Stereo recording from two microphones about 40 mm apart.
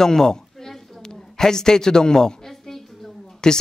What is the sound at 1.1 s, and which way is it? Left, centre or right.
A man's voice, centre.